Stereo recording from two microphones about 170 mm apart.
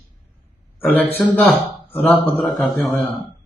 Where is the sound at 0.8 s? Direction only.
10° left (ahead or behind).